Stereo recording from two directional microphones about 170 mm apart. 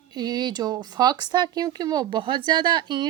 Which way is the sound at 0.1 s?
25° right (ahead or behind).